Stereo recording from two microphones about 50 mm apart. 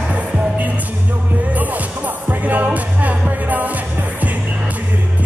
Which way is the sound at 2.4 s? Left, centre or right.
Right.